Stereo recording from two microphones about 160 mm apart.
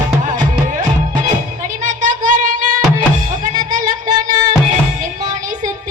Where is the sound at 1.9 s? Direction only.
55° right (ahead or behind).